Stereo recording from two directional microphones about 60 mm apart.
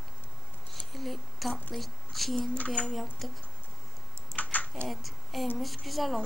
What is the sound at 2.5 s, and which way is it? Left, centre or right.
Speech, left.